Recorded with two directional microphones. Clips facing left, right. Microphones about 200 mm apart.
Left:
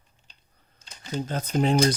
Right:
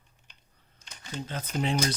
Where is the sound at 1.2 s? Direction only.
40° left (ahead or behind).